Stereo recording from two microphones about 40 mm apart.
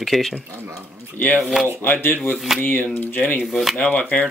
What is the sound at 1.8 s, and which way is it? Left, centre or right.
Speech, left.